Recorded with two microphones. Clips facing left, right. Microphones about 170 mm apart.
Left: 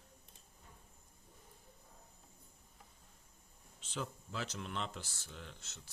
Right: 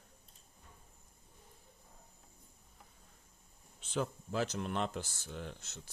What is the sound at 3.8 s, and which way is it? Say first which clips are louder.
Speech: right 7 dB; 55° right (ahead or behind).